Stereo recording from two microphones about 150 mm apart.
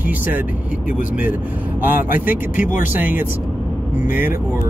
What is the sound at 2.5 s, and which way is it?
Speech, 60° left (ahead or behind).